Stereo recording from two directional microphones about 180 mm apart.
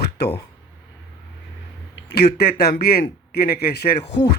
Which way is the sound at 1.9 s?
65° left (ahead or behind).